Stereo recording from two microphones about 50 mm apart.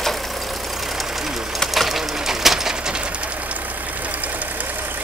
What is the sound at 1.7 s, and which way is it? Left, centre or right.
Bird, centre.